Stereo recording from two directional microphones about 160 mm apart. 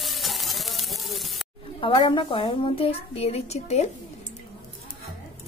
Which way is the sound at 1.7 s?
35° left (ahead or behind).